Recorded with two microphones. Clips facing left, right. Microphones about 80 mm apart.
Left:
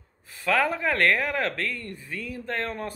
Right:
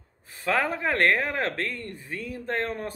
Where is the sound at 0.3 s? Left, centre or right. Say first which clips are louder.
Left 2 dB; right.